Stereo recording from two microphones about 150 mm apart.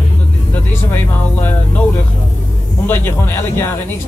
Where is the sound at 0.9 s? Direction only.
15° left (ahead or behind).